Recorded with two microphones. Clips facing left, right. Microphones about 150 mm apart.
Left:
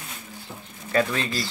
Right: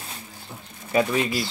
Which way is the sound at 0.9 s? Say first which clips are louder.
Right 2 dB; 15° right (ahead or behind).